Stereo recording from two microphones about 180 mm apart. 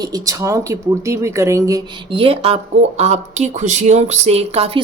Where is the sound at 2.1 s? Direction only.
30° right (ahead or behind).